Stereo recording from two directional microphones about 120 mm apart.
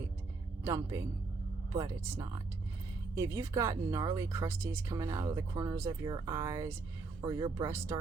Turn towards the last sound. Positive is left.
turn(degrees=-20)  # may be behind; listen again after turning